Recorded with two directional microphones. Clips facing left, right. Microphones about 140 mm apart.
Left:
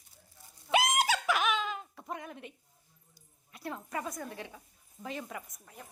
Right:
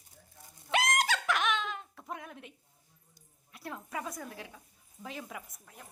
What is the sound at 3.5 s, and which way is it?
A woman's voice, centre (ahead or behind).